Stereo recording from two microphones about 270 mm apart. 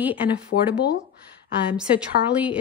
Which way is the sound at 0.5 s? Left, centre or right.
Left.